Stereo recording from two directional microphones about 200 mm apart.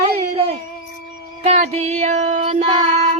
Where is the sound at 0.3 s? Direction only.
30° right (ahead or behind).